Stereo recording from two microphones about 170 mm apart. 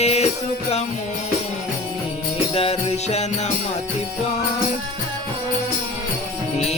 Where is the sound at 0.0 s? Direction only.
40° left (ahead or behind).